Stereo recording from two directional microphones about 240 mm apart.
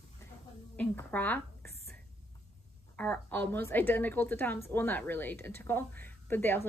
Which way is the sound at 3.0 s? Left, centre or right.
Centre.